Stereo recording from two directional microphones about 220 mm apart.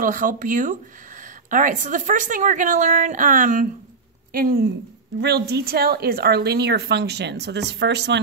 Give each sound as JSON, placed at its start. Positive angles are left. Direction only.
{"t": 0.0, "sound": "a woman's voice", "side_deg": -40}